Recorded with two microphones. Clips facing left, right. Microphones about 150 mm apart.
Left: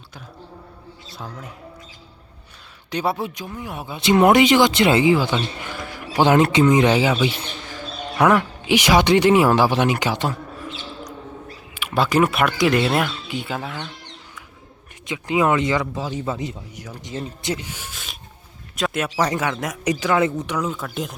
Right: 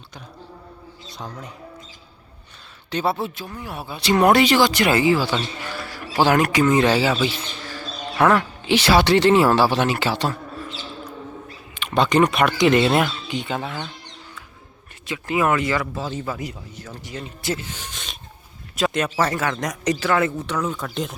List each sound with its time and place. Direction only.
2.9 s speech: 15° left (ahead or behind)
15.0 s speech: 20° left (ahead or behind)
16.7 s speech: 15° left (ahead or behind)